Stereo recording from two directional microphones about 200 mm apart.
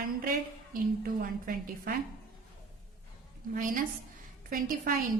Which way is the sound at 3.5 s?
40° right (ahead or behind).